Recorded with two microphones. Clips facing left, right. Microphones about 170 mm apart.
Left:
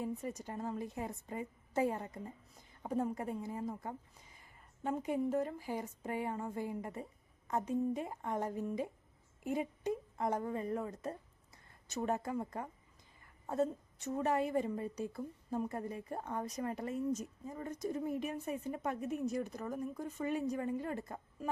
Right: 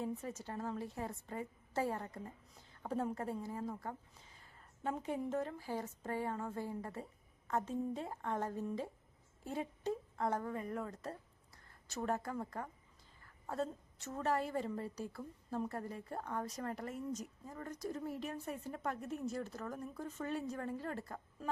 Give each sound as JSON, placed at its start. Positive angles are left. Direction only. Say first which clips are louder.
{"t": 0.0, "sound": "a woman's voice", "louder": "left 2 dB", "side_deg": 10}
{"t": 4.4, "sound": "a sound", "louder": "left 4 dB", "side_deg": 10}
{"t": 5.3, "sound": "a woman's voice", "louder": "left 3 dB", "side_deg": 10}